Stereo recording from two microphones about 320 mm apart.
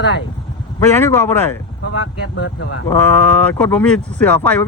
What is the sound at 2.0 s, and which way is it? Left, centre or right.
Speech, left.